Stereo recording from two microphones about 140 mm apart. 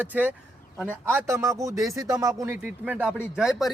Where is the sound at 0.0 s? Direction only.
15° right (ahead or behind).